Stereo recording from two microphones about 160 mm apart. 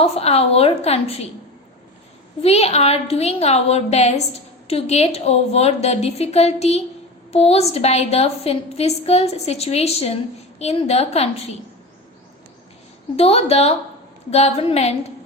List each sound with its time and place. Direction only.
0.0 s a woman's voice: 40° left (ahead or behind)
2.4 s a woman's voice: 40° left (ahead or behind)
13.1 s a woman's voice: 40° left (ahead or behind)